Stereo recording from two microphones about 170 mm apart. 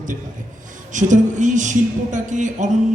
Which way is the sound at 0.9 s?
45° right (ahead or behind).